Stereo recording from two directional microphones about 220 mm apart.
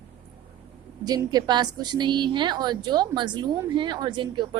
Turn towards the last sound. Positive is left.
turn(degrees=-20)  # may be behind; listen again after turning